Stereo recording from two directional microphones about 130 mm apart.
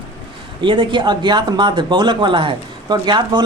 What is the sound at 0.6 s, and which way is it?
Speech, 40° right (ahead or behind).